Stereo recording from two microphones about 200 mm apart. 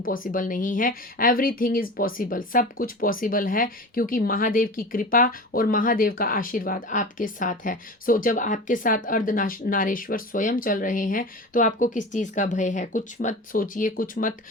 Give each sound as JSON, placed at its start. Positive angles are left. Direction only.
{"t": 0.1, "sound": "speech", "side_deg": 45}